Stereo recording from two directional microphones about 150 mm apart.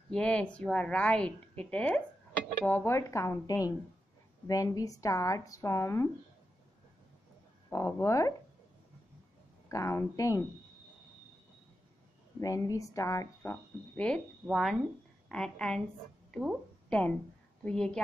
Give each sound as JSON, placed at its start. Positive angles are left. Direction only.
{"t": 0.1, "sound": "a woman's voice", "side_deg": 5}
{"t": 7.7, "sound": "speech", "side_deg": 20}
{"t": 9.7, "sound": "speech", "side_deg": 20}
{"t": 12.4, "sound": "a woman's voice", "side_deg": 20}
{"t": 16.3, "sound": "a sound", "side_deg": 0}
{"t": 17.6, "sound": "a woman's voice", "side_deg": 5}